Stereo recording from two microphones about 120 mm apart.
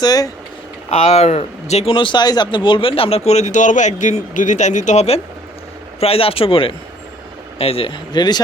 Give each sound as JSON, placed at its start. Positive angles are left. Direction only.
{"t": 0.0, "sound": "speech", "side_deg": 35}
{"t": 0.9, "sound": "speech", "side_deg": 65}
{"t": 1.9, "sound": "speech", "side_deg": 45}
{"t": 6.0, "sound": "a man's voice", "side_deg": 55}